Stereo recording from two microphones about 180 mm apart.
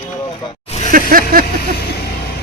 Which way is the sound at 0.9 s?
50° right (ahead or behind).